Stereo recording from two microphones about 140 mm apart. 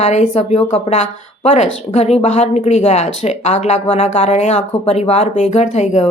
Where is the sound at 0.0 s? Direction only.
55° left (ahead or behind).